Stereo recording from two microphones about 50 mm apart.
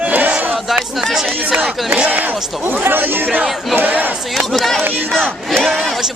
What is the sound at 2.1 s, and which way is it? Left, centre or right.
Speech, right.